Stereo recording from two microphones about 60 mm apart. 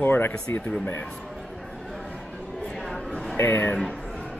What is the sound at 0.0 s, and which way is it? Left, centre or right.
Speech, left.